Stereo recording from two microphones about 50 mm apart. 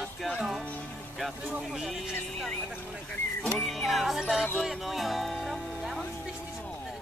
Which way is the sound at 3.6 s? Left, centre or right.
Centre.